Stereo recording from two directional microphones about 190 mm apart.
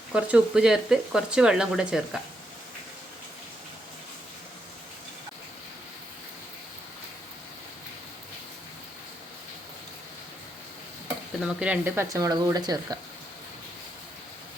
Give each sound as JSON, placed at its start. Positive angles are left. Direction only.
{"t": 0.1, "sound": "speech", "side_deg": -5}
{"t": 11.3, "sound": "speech", "side_deg": -5}